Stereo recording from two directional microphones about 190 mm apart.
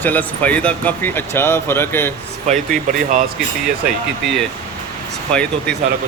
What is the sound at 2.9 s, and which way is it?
Speech, 40° right (ahead or behind).